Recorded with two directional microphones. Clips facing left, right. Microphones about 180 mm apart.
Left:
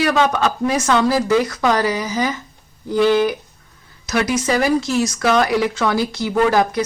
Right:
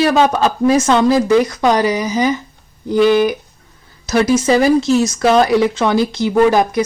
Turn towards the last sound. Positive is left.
turn(degrees=-15)  # may be behind; listen again after turning